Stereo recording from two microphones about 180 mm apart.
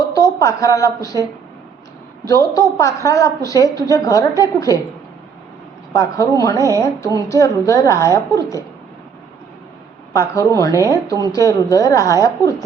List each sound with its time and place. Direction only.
0.0 s a woman's voice: 20° left (ahead or behind)
2.2 s a woman's voice: 20° left (ahead or behind)
5.9 s a woman's voice: 20° left (ahead or behind)
10.1 s a woman's voice: 15° left (ahead or behind)